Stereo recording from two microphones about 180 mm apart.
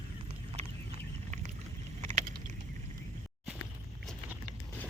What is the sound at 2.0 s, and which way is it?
Vehicle, 40° right (ahead or behind).